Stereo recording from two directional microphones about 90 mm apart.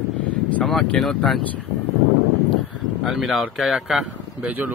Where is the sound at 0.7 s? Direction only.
5° left (ahead or behind).